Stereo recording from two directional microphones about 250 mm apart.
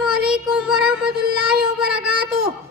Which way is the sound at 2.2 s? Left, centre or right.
Right.